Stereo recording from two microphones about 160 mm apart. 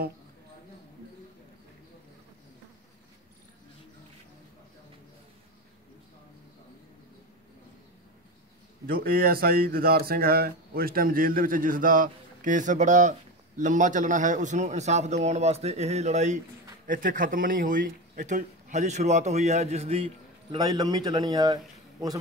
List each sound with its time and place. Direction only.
8.8 s a man's voice: 65° right (ahead or behind); by 20.1 s 40° right (ahead or behind)
20.5 s a man's voice: 25° right (ahead or behind)